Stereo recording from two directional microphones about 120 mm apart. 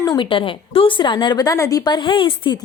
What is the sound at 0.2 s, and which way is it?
A woman's voice, 45° left (ahead or behind).